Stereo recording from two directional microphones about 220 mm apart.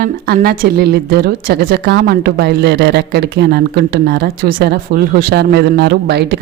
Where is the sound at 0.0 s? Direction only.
45° right (ahead or behind).